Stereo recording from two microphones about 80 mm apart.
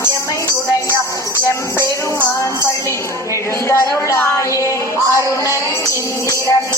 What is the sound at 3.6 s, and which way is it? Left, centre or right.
Music, left.